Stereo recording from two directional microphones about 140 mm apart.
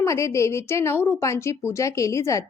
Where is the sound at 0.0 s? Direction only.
20° left (ahead or behind).